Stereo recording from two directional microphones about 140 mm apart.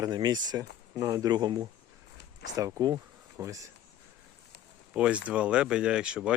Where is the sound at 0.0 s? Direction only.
30° right (ahead or behind).